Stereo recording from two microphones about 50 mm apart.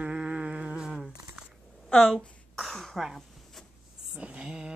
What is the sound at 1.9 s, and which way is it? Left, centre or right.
Speech, centre.